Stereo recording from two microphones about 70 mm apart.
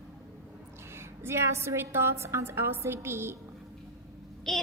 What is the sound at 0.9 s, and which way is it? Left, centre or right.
A woman's voice, right.